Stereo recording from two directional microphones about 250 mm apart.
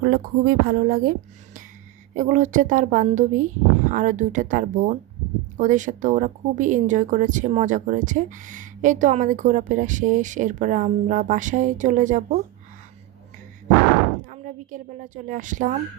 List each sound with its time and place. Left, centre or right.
0.0 s speech: right
2.1 s speech: right
14.3 s speech: right